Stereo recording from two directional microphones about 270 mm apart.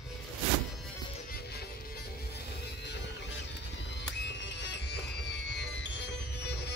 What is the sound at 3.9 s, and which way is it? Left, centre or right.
Music, left.